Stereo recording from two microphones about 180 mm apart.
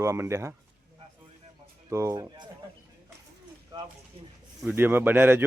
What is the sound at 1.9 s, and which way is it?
Speech, 15° right (ahead or behind).